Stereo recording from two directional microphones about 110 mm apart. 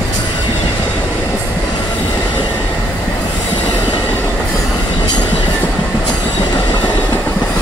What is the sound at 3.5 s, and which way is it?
Train, 45° left (ahead or behind).